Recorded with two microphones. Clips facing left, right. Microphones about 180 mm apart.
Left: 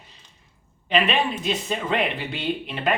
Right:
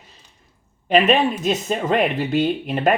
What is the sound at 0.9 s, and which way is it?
Speech, 45° right (ahead or behind).